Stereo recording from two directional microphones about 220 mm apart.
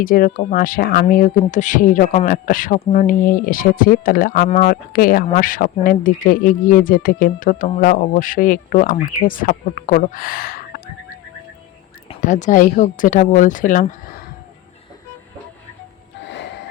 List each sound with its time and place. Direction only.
0.0 s speech: 40° left (ahead or behind)
12.0 s speech: 35° left (ahead or behind)